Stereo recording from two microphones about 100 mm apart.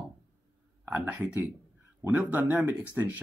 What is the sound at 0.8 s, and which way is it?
Speech, 20° right (ahead or behind).